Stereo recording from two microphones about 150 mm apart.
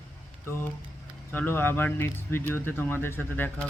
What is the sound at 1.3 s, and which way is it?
Speech, 15° left (ahead or behind).